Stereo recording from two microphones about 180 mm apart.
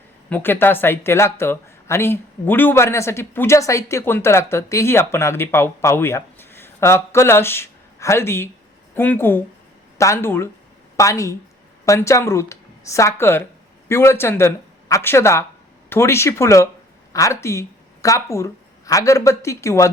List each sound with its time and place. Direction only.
0.3 s speech: 10° left (ahead or behind)